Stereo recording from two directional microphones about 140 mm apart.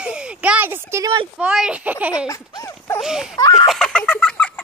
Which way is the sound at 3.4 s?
25° left (ahead or behind).